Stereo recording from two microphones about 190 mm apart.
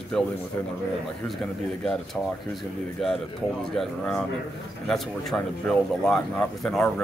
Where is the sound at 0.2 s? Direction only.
Centre (ahead or behind).